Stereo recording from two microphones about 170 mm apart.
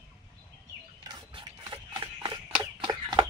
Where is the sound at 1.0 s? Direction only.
25° right (ahead or behind).